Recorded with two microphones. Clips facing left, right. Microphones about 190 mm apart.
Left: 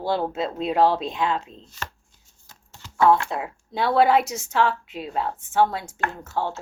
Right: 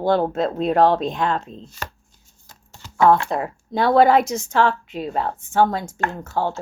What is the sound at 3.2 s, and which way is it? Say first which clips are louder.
Speech: right 5 dB; 45° right (ahead or behind).